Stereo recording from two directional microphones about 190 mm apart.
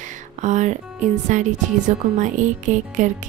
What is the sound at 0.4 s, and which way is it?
Speech, 40° right (ahead or behind).